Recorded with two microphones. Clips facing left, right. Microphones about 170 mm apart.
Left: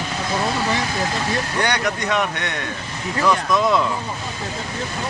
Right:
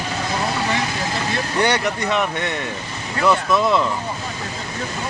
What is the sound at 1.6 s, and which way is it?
Speech, 10° right (ahead or behind).